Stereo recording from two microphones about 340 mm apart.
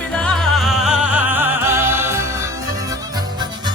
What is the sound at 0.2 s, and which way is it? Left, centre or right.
Music, centre.